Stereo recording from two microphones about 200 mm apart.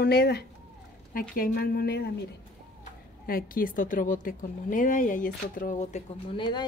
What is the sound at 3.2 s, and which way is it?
A woman's voice, 45° left (ahead or behind).